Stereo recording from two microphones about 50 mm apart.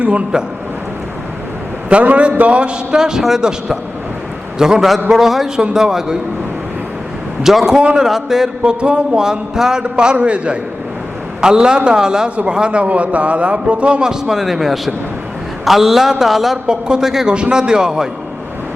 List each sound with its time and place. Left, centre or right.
0.0 s a man's voice: right
1.9 s a man's voice: right; by 6.1 s centre
7.4 s a man's voice: centre
8.8 s a man's voice: right